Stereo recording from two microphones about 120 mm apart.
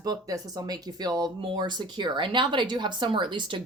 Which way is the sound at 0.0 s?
30° right (ahead or behind).